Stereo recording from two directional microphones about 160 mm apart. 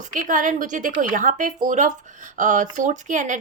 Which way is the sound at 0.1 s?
55° right (ahead or behind).